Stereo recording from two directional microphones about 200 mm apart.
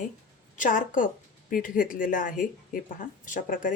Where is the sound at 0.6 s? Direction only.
40° left (ahead or behind).